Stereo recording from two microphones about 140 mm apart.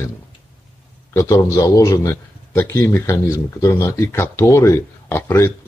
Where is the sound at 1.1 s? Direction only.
20° left (ahead or behind).